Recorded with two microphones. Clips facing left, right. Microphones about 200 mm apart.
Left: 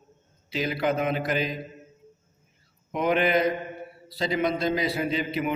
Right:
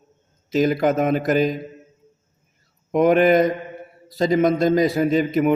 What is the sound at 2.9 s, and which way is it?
A man's voice, 45° right (ahead or behind).